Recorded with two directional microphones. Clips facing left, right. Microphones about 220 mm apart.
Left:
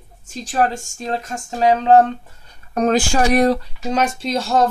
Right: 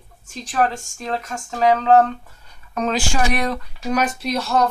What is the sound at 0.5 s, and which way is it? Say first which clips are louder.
A woman's voice: left 2 dB; 35° left (ahead or behind).